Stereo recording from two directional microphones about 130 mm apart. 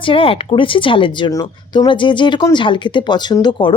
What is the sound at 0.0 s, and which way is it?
Speech, 45° left (ahead or behind).